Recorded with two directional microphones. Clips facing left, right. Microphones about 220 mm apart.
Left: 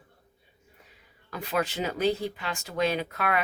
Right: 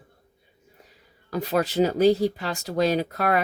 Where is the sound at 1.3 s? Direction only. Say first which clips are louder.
Right 6 dB; 40° right (ahead or behind).